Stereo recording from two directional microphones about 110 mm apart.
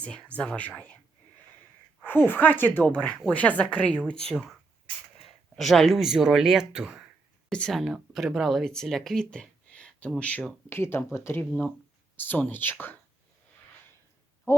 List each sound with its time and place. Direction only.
0.0 s speech: 10° left (ahead or behind)
2.0 s speech: 20° left (ahead or behind)
4.3 s speech: centre (ahead or behind)
5.5 s speech: centre (ahead or behind)
7.5 s speech: 5° left (ahead or behind)